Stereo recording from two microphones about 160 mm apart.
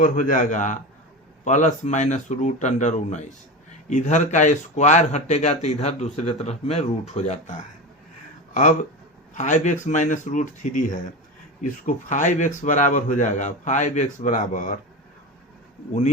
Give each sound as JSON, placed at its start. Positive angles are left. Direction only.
{"t": 0.0, "sound": "speech", "side_deg": 55}
{"t": 8.5, "sound": "speech", "side_deg": 50}